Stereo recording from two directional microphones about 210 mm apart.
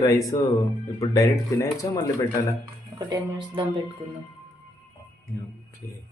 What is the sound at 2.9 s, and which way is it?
Speech, 20° right (ahead or behind).